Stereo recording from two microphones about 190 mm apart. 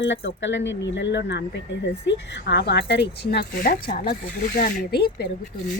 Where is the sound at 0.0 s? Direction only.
65° left (ahead or behind).